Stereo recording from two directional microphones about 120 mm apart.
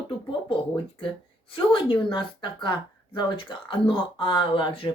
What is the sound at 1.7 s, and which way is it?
Speech, 40° left (ahead or behind).